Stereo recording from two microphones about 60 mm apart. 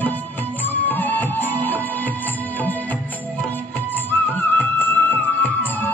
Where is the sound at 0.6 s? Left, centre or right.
Left.